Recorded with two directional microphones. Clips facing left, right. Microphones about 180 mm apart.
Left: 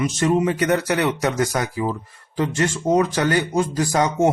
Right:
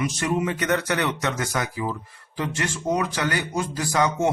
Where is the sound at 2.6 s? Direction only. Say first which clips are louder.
Left 7 dB; 25° left (ahead or behind).